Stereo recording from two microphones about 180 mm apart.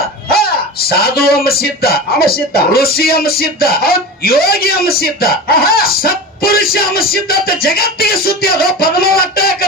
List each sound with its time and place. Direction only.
0.3 s speech: 60° left (ahead or behind)